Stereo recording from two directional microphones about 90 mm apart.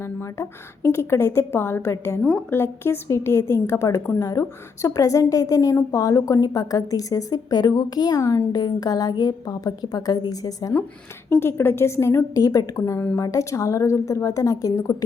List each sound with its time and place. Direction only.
0.0 s a woman's voice: 30° left (ahead or behind)
11.3 s a woman's voice: 25° left (ahead or behind)